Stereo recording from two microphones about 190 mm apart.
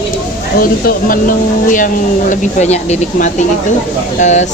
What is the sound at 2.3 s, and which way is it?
Speech, 35° left (ahead or behind).